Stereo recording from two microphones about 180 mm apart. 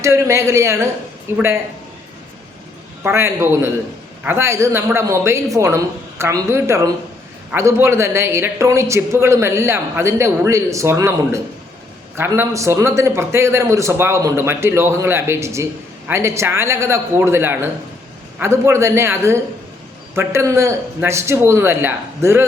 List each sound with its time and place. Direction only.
0.0 s speech: 15° right (ahead or behind)
3.0 s speech: 15° right (ahead or behind)